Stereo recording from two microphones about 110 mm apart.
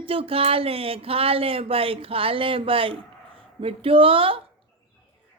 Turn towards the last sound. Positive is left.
turn(degrees=-55)  # may be behind; listen again after turning